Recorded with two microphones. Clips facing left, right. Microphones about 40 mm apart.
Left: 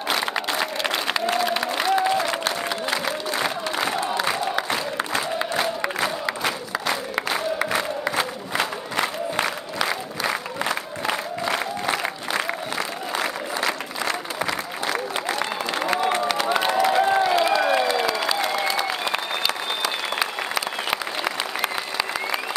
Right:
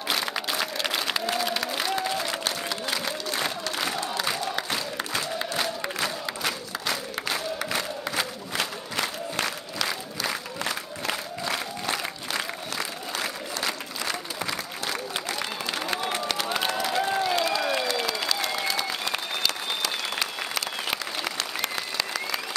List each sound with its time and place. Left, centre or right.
0.1 s applause: centre
2.7 s crowd: centre
15.1 s applause: centre
15.7 s a sound: left